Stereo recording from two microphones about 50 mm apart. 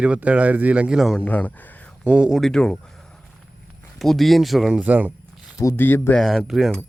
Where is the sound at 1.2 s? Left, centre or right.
Left.